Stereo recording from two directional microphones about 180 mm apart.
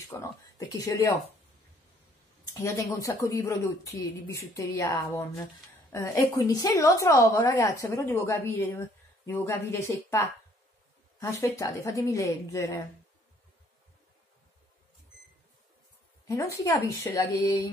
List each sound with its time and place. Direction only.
0.2 s a woman's voice: 20° left (ahead or behind)
2.5 s a woman's voice: 15° left (ahead or behind)
16.3 s a woman's voice: 15° left (ahead or behind)